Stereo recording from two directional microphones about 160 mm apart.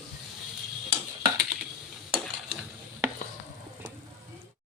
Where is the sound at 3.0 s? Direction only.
15° right (ahead or behind).